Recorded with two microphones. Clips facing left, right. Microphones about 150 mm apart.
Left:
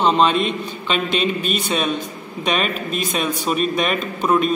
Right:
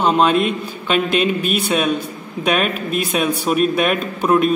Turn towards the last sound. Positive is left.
turn(degrees=-10)  # may be behind; listen again after turning